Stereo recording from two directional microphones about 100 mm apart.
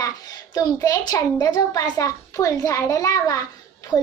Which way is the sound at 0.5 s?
40° left (ahead or behind).